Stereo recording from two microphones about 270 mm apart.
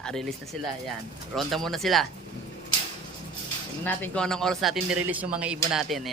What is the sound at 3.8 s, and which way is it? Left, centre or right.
Speech, centre.